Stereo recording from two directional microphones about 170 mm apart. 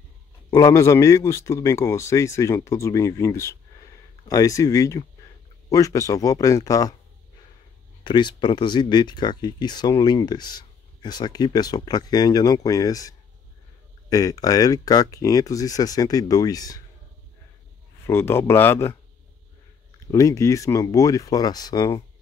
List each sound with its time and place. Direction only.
0.5 s speech: 20° left (ahead or behind)
8.0 s speech: 25° left (ahead or behind)
18.0 s speech: 15° left (ahead or behind)
20.1 s speech: 20° left (ahead or behind)